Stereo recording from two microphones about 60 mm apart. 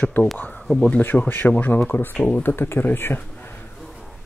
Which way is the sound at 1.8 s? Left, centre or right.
Left.